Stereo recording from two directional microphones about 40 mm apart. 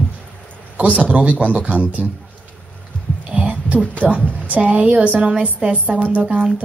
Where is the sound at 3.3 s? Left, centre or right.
Right.